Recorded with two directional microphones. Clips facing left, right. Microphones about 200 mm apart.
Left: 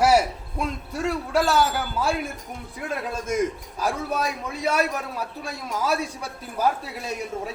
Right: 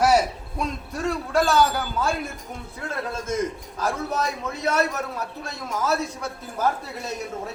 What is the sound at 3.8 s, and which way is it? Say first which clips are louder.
Speech: even; 10° left (ahead or behind).